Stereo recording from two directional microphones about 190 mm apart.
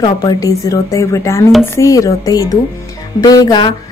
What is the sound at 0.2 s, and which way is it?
A woman's voice, 20° left (ahead or behind).